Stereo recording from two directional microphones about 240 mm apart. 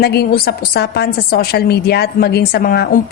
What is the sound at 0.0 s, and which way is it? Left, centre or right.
A woman's voice, left.